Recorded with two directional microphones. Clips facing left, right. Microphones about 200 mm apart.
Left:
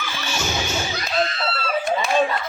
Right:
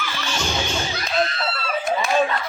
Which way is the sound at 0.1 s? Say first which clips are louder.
Left 1 dB; 10° left (ahead or behind).